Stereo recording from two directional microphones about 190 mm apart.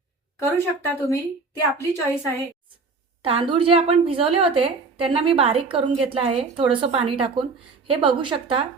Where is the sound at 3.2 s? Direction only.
30° right (ahead or behind).